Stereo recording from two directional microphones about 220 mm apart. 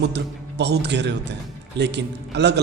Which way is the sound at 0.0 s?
50° right (ahead or behind).